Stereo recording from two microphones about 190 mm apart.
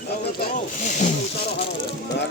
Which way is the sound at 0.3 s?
40° left (ahead or behind).